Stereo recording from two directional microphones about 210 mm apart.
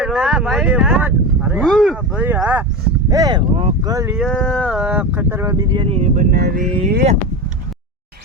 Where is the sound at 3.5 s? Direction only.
30° right (ahead or behind).